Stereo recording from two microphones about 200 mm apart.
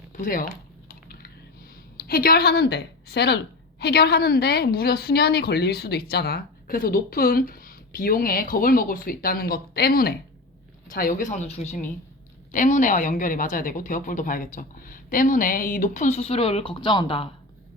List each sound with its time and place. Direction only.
0.1 s chewing: 45° left (ahead or behind)
2.0 s a woman's voice: 50° left (ahead or behind); by 17.2 s 25° left (ahead or behind)